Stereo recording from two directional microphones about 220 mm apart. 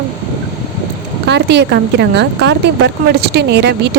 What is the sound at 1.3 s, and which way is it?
A woman's voice, 50° right (ahead or behind).